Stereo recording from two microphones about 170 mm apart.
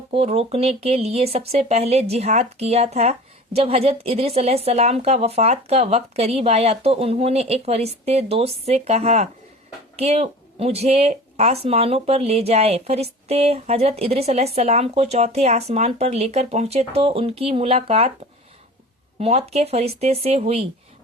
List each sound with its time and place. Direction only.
0.1 s speech: 35° right (ahead or behind)
19.2 s speech: 35° right (ahead or behind)